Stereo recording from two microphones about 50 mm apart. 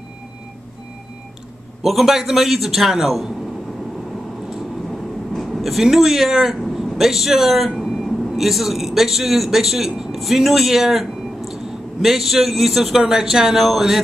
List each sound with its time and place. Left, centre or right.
1.8 s a man's voice: centre
5.5 s speech: centre